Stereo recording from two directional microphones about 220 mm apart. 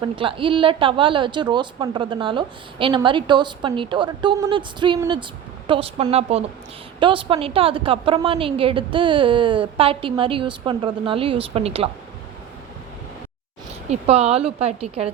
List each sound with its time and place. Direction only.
0.0 s a woman's voice: 25° right (ahead or behind)
13.9 s a woman's voice: 25° right (ahead or behind)